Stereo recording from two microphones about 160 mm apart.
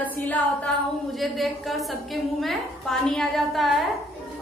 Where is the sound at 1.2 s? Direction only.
Centre (ahead or behind).